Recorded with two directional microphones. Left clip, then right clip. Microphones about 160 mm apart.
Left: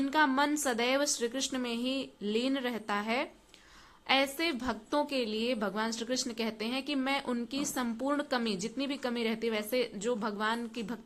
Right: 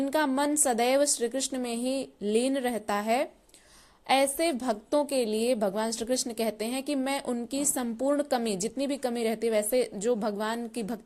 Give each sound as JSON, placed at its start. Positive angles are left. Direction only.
{"t": 0.3, "sound": "a woman's voice", "side_deg": -35}